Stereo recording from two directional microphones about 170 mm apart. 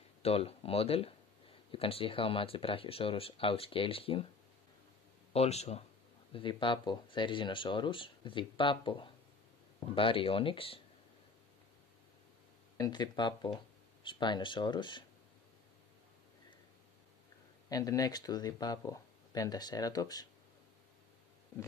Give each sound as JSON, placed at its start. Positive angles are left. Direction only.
{"t": 0.2, "sound": "speech", "side_deg": 35}
{"t": 5.3, "sound": "speech", "side_deg": 40}
{"t": 12.7, "sound": "speech", "side_deg": 25}
{"t": 17.6, "sound": "speech", "side_deg": 20}